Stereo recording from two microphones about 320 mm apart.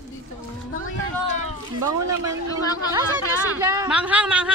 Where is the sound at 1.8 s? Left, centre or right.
Right.